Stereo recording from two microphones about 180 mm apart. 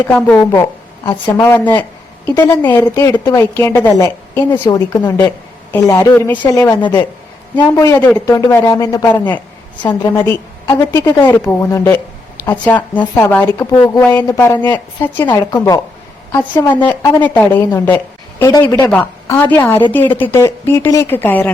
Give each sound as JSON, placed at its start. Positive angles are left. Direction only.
{"t": 0.0, "sound": "a woman's voice", "side_deg": 10}
{"t": 13.7, "sound": "a woman's voice", "side_deg": 25}
{"t": 14.1, "sound": "a woman's voice", "side_deg": 10}
{"t": 15.4, "sound": "a woman's voice", "side_deg": 20}